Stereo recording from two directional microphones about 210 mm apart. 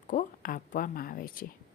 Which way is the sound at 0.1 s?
40° left (ahead or behind).